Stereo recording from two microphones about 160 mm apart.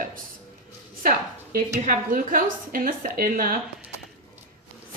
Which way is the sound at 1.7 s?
60° right (ahead or behind).